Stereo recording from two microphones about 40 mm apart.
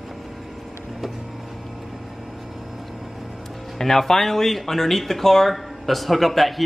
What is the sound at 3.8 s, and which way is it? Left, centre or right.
Speech, centre.